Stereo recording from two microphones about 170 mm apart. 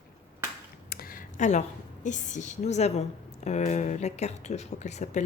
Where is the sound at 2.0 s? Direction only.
45° left (ahead or behind).